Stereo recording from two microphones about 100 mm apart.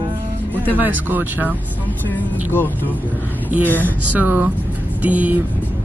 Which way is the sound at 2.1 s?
20° left (ahead or behind).